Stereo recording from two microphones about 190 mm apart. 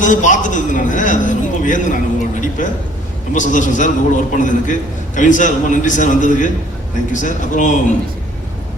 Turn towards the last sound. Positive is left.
turn(degrees=40)  # may be behind; listen again after turning